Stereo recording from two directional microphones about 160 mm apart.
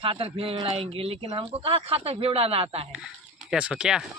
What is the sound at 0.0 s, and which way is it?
Speech, 35° right (ahead or behind).